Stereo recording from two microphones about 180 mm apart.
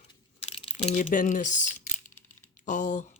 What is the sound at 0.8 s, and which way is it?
Speech, 40° left (ahead or behind).